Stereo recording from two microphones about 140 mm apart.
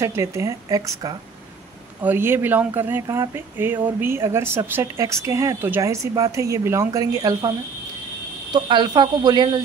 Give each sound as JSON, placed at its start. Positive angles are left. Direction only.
{"t": 0.0, "sound": "a woman's voice", "side_deg": -20}
{"t": 8.5, "sound": "speech", "side_deg": -35}